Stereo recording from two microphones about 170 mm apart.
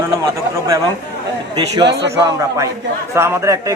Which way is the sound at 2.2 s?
20° right (ahead or behind).